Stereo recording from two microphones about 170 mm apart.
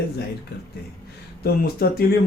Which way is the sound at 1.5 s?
65° left (ahead or behind).